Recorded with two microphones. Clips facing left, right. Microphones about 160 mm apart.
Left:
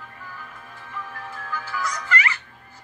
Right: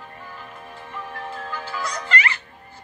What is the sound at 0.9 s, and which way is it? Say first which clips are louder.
Music: right 3 dB; 25° right (ahead or behind).